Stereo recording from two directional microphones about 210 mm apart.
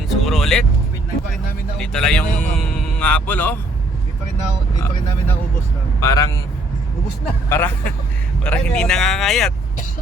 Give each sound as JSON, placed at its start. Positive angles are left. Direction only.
{"t": 0.1, "sound": "vehicle", "side_deg": 0}
{"t": 1.8, "sound": "speech", "side_deg": 5}
{"t": 6.0, "sound": "speech", "side_deg": 15}
{"t": 7.5, "sound": "speech", "side_deg": 10}